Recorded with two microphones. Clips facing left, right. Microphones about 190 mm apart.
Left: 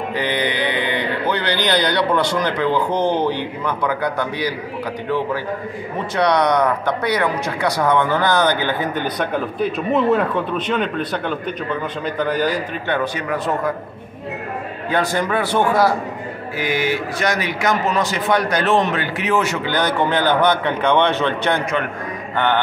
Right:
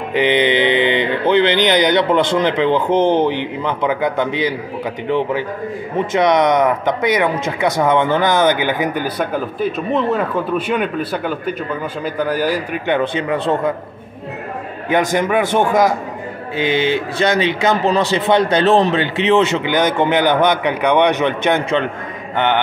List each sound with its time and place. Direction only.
0.1 s speech: 20° right (ahead or behind)
5.9 s a man's voice: 20° right (ahead or behind)
8.9 s a man's voice: 5° right (ahead or behind); by 13.6 s 25° right (ahead or behind)
14.9 s a man's voice: 20° right (ahead or behind)